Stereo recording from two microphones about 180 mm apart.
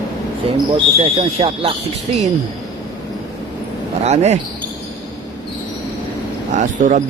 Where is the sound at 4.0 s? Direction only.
40° right (ahead or behind).